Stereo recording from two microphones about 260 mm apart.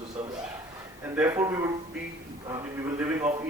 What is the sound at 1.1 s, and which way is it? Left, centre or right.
Speech, centre.